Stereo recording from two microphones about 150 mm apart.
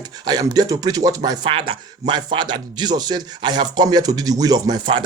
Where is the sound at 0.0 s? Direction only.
25° right (ahead or behind).